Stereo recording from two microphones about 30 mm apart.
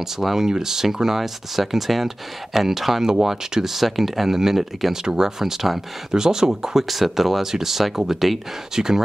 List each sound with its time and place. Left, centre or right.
0.2 s speech: centre
5.4 s speech: centre
6.1 s speech: right
8.7 s speech: centre